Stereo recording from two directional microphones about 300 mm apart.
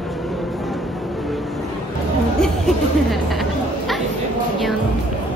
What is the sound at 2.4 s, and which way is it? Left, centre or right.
Speech, centre.